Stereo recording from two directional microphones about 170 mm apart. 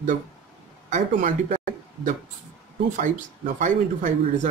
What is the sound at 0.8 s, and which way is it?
Speech, 45° right (ahead or behind).